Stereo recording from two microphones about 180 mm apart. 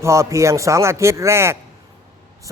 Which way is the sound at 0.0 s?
15° right (ahead or behind).